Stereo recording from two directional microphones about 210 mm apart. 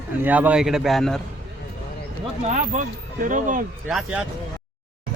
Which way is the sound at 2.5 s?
35° right (ahead or behind).